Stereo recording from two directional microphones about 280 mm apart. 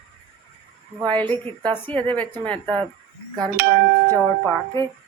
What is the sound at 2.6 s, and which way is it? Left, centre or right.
Speech, centre.